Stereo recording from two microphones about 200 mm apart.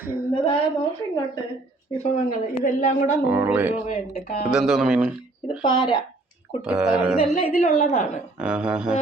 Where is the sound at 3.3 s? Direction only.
10° right (ahead or behind).